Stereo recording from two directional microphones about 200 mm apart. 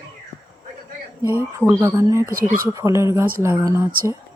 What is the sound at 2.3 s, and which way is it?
Speech, 45° right (ahead or behind).